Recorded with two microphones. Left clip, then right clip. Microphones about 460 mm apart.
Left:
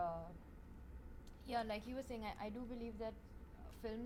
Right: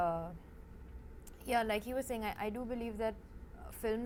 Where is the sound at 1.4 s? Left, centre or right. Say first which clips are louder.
Right 9 dB; right.